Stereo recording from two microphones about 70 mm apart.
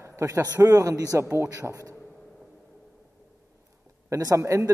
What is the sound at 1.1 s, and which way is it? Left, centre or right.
Speech, right.